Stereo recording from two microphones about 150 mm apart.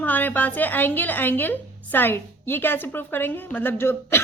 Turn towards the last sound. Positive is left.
turn(degrees=15)  # may be behind; listen again after turning